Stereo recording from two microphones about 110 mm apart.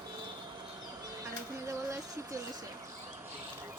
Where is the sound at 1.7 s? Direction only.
30° right (ahead or behind).